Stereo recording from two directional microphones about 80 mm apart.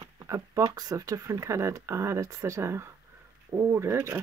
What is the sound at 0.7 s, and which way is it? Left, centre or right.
Speech, right.